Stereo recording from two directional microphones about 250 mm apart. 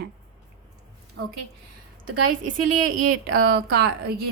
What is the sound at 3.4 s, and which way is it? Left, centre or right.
Speech, right.